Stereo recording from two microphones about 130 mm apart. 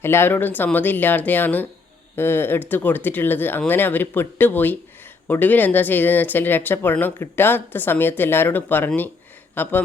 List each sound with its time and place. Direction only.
0.0 s speech: 20° left (ahead or behind)